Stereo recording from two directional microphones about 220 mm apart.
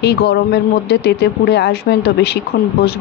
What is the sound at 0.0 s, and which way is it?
Speech, 50° left (ahead or behind).